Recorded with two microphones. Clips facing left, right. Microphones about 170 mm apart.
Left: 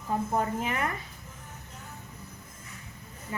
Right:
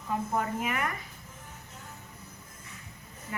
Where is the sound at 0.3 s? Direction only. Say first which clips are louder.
Left 1 dB; 30° left (ahead or behind).